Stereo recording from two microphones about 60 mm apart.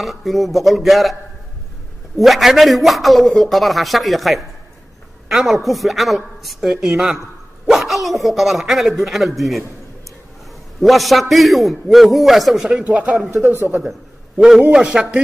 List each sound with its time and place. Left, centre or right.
0.0 s a man's voice: centre
2.1 s a man's voice: centre
10.8 s a man's voice: centre
12.8 s speech: right
13.3 s speech: right
14.4 s a man's voice: centre